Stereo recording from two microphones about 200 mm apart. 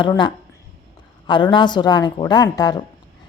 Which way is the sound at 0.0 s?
20° left (ahead or behind).